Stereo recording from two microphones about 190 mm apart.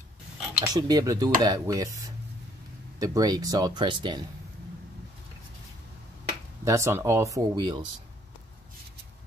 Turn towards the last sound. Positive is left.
turn(degrees=-20)  # may be behind; listen again after turning